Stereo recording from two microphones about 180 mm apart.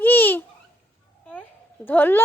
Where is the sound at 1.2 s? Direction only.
5° left (ahead or behind).